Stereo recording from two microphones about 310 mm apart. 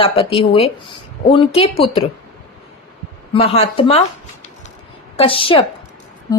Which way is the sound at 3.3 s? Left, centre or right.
Centre.